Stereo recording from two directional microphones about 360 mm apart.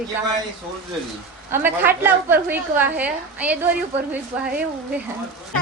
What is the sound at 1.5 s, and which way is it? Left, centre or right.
A woman's voice, centre.